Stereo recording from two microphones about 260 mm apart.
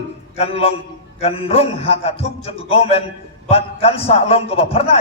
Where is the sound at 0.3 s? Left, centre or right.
Left.